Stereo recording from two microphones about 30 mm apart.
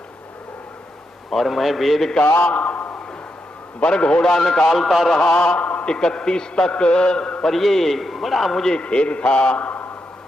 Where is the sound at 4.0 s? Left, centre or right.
Left.